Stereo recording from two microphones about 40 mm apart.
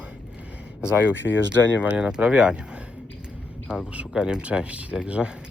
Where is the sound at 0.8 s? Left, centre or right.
Right.